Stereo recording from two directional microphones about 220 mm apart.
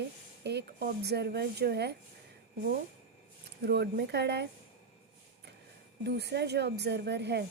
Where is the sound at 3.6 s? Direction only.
50° right (ahead or behind).